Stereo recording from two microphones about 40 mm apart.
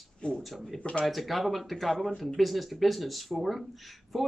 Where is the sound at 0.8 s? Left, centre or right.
Left.